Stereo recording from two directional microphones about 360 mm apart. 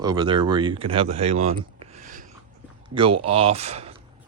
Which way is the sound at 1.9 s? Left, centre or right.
Right.